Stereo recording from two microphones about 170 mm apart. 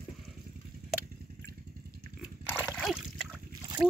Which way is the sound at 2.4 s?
10° left (ahead or behind).